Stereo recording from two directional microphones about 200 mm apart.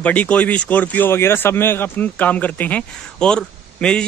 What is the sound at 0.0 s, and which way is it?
Speech, 5° left (ahead or behind).